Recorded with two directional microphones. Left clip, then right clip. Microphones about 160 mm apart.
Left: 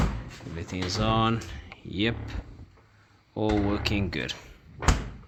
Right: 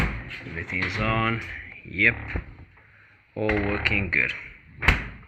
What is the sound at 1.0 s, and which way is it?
Speech, 5° right (ahead or behind).